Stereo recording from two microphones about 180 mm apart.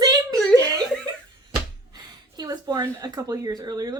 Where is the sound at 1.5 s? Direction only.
25° right (ahead or behind).